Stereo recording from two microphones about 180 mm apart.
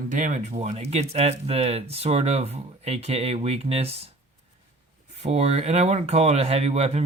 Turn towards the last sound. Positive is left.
turn(degrees=-35)  # may be behind; listen again after turning